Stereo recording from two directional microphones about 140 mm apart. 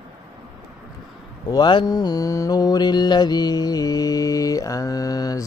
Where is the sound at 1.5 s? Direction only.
30° left (ahead or behind).